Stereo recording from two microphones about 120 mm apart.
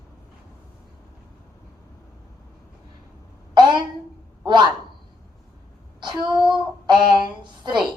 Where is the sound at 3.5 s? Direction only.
40° right (ahead or behind).